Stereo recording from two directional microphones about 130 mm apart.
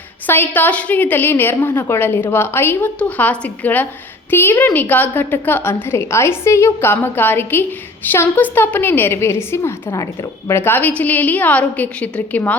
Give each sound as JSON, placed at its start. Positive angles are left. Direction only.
{"t": 0.3, "sound": "a woman's voice", "side_deg": 15}